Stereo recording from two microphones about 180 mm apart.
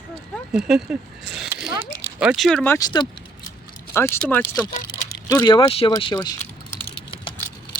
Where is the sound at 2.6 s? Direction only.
20° left (ahead or behind).